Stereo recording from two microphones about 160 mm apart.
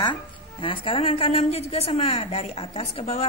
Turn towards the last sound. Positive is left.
turn(degrees=40)  # may be behind; listen again after turning